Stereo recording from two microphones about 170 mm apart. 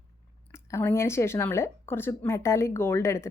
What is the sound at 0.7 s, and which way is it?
A woman's voice, 15° left (ahead or behind).